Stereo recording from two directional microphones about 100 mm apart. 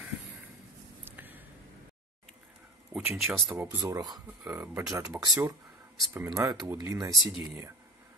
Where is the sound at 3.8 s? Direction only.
40° right (ahead or behind).